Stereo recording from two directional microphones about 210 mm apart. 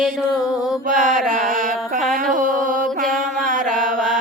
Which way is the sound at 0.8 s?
35° right (ahead or behind).